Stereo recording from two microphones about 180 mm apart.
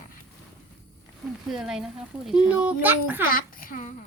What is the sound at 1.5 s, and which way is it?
A child's voice, 5° right (ahead or behind).